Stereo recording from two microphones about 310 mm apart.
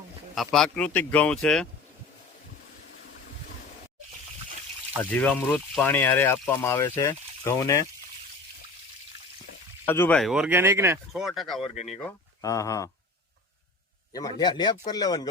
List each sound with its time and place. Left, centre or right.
0.3 s speech: centre
5.1 s speech: centre
9.8 s speech: centre
11.6 s speech: left
11.9 s speech: centre
14.1 s speech: centre